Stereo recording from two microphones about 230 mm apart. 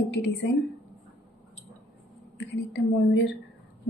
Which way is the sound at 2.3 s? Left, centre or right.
Left.